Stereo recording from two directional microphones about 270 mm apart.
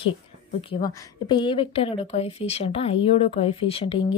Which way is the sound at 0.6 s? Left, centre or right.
Centre.